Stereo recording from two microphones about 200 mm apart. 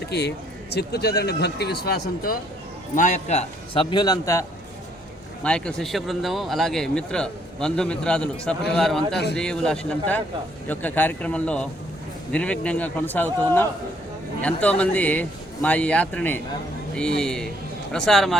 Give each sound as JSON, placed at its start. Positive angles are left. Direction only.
{"t": 0.1, "sound": "a man's voice", "side_deg": 55}
{"t": 2.9, "sound": "a man's voice", "side_deg": 35}
{"t": 5.4, "sound": "speech", "side_deg": 5}